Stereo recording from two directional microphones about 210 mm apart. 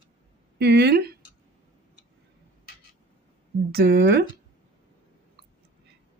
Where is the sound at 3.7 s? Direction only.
50° right (ahead or behind).